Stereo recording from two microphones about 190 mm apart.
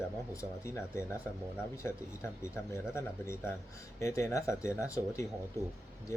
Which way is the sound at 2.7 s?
15° left (ahead or behind).